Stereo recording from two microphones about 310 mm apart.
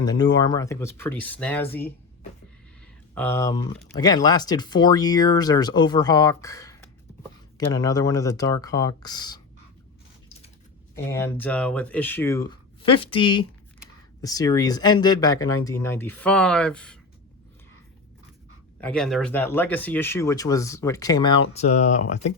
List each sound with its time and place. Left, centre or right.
0.0 s speech: centre
3.2 s speech: centre
10.9 s speech: centre
18.8 s speech: centre; by 21.9 s left